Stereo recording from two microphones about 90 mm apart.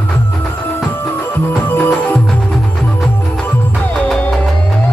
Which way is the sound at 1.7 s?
25° left (ahead or behind).